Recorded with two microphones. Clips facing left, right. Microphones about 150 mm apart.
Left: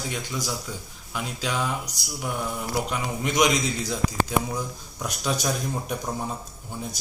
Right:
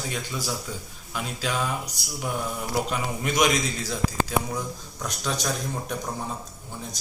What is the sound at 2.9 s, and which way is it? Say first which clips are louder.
A man's voice: even; 20° left (ahead or behind).